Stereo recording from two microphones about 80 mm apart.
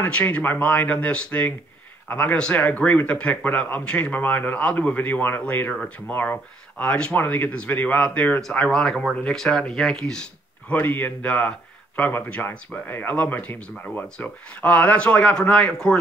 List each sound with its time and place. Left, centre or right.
0.0 s speech: centre
10.7 s speech: left